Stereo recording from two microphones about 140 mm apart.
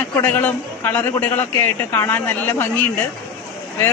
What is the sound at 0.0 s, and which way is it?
A man's voice, 15° left (ahead or behind).